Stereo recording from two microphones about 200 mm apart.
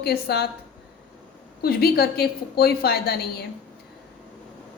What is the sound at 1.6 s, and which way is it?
A woman's voice, 50° left (ahead or behind).